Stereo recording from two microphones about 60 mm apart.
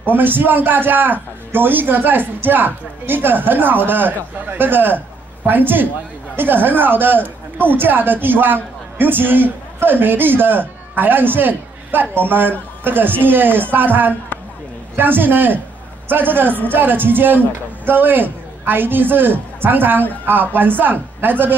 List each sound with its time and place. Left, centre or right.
0.0 s a woman's voice: right